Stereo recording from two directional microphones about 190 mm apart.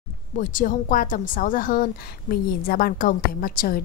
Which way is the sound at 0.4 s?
45° left (ahead or behind).